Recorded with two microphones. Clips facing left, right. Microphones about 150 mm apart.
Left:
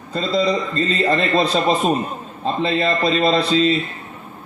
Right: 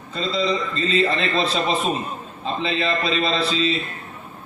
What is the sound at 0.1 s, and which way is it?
A man's voice, 45° left (ahead or behind).